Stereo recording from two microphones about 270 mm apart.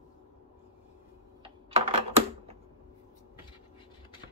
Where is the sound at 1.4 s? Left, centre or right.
Right.